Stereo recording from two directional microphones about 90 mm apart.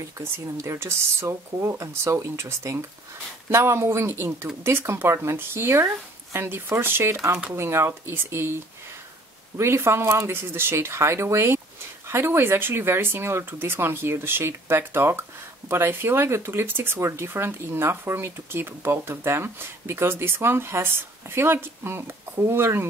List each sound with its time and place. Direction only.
0.2 s speech: 30° right (ahead or behind)
9.6 s speech: 30° right (ahead or behind)